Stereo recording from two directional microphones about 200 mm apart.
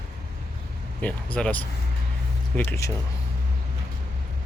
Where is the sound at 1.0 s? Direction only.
5° left (ahead or behind).